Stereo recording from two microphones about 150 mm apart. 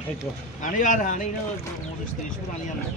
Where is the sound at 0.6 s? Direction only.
60° left (ahead or behind).